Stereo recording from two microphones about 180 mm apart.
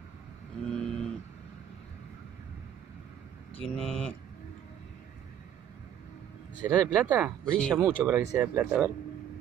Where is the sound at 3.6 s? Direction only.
Centre (ahead or behind).